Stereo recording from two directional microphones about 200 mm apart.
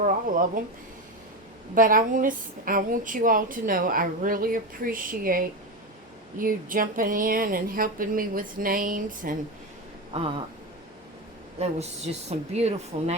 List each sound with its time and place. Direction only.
0.0 s a woman's voice: 40° right (ahead or behind)
1.7 s a woman's voice: 45° right (ahead or behind)
10.1 s a sound: 25° right (ahead or behind)
11.6 s speech: 35° right (ahead or behind)